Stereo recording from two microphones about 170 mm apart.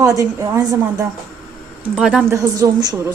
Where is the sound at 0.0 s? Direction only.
20° right (ahead or behind).